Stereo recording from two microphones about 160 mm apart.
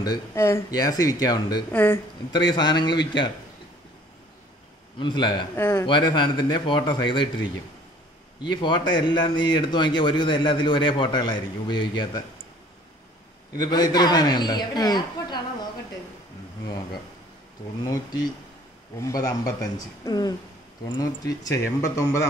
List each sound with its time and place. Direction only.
0.3 s a man's voice: 15° left (ahead or behind)
1.7 s speech: 10° left (ahead or behind)
2.3 s a man's voice: 25° left (ahead or behind)
4.9 s a man's voice: 30° left (ahead or behind)
8.4 s a man's voice: 30° left (ahead or behind)
13.6 s a man's voice: 25° left (ahead or behind)
17.8 s a man's voice: 25° left (ahead or behind)